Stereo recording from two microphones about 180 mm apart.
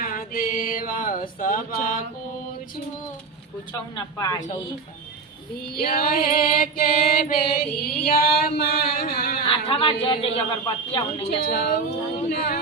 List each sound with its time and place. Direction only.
0.0 s a sound: 55° left (ahead or behind)
3.7 s a woman's voice: 20° left (ahead or behind)
5.7 s music: 55° left (ahead or behind)
9.5 s speech: 30° left (ahead or behind)
11.4 s music: 55° left (ahead or behind)
12.3 s a sound: 60° left (ahead or behind)